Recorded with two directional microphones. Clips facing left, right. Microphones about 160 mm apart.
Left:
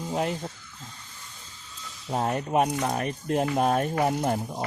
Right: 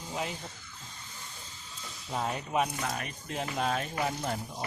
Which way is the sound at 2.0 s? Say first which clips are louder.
Left 7 dB; 45° left (ahead or behind).